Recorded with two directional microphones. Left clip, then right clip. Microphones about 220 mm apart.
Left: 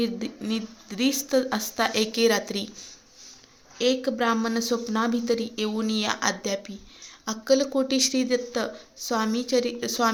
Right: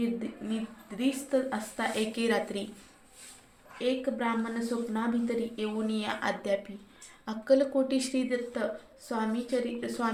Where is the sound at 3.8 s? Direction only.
40° left (ahead or behind).